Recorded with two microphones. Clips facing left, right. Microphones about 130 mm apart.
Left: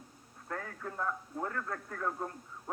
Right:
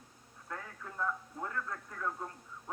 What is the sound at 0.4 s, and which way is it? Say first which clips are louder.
Speech: left 5 dB; 35° left (ahead or behind).